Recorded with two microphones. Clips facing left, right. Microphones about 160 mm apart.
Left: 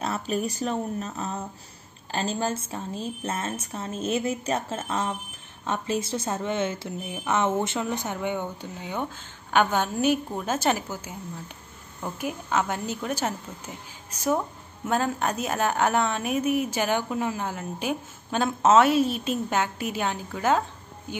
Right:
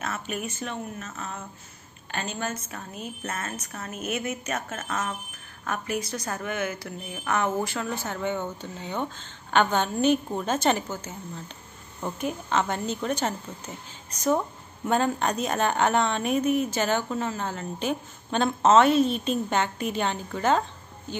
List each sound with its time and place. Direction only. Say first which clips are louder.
0.0 s a woman's voice: left 5 dB; 35° left (ahead or behind); by 20.6 s 5° left (ahead or behind)